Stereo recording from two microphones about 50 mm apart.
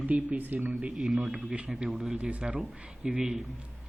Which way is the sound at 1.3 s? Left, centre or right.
Right.